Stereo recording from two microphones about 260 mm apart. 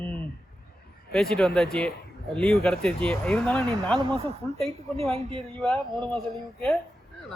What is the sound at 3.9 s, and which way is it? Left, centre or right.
Speech, right.